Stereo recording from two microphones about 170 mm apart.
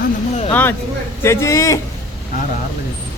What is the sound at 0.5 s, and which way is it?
A man's voice, 10° left (ahead or behind).